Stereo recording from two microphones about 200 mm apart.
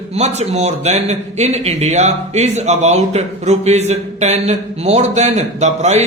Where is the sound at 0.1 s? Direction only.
35° right (ahead or behind).